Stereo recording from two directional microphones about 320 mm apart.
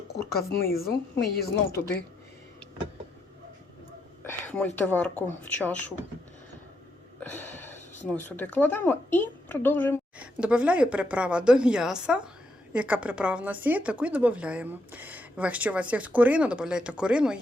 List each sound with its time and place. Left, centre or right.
0.8 s a woman's voice: left
4.2 s a woman's voice: centre
7.2 s a sound: centre
8.0 s speech: centre